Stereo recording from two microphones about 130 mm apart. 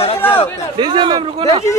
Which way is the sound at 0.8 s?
35° right (ahead or behind).